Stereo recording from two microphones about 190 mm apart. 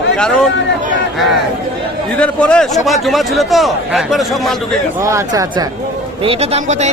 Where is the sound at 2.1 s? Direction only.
5° left (ahead or behind).